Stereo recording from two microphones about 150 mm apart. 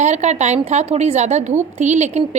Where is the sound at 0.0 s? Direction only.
50° right (ahead or behind).